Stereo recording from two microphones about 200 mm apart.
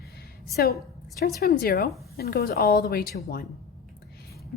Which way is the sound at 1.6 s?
50° left (ahead or behind).